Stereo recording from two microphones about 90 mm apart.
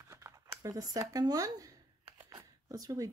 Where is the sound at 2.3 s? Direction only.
45° right (ahead or behind).